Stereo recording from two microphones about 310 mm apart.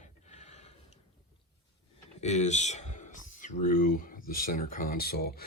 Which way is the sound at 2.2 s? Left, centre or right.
Left.